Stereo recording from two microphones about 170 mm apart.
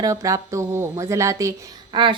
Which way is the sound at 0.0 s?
20° right (ahead or behind).